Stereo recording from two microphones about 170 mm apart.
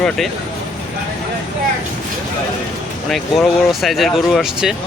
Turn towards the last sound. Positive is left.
turn(degrees=-5)  # may be behind; listen again after turning